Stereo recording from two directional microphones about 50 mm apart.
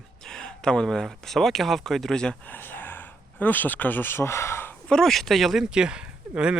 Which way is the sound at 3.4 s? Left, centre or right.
Left.